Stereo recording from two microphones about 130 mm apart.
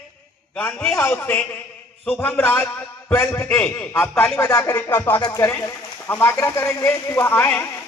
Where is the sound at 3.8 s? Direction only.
10° left (ahead or behind).